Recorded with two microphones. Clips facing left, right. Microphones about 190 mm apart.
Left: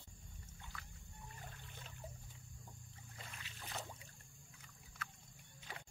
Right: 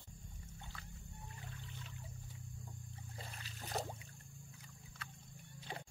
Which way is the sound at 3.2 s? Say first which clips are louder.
Right 3 dB; 35° right (ahead or behind).